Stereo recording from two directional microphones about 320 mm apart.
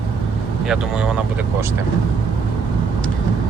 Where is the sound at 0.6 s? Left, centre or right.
Centre.